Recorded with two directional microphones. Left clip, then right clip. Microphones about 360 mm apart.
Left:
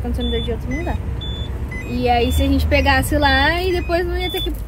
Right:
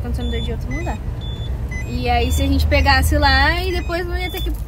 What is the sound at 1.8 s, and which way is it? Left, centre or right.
Speech, centre.